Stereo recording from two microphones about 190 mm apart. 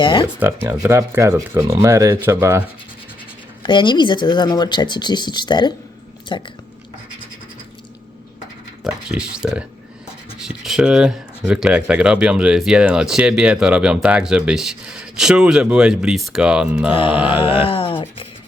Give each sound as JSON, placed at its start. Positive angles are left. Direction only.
{"t": 0.0, "sound": "speech", "side_deg": 25}
{"t": 0.3, "sound": "speech", "side_deg": -10}
{"t": 3.6, "sound": "speech", "side_deg": 25}
{"t": 8.8, "sound": "speech", "side_deg": -5}
{"t": 17.7, "sound": "a sound", "side_deg": 30}